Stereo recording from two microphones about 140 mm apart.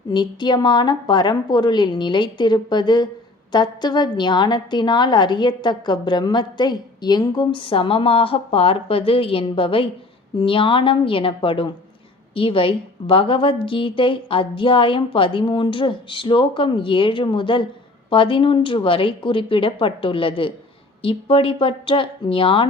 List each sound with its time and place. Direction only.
0.1 s a woman's voice: 30° left (ahead or behind)